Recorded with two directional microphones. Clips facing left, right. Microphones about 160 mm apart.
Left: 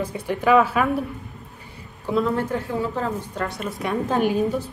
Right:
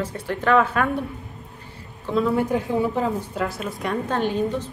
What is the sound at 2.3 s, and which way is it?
Speech, 15° right (ahead or behind).